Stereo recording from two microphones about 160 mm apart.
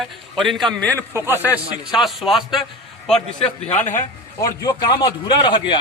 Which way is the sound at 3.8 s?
50° left (ahead or behind).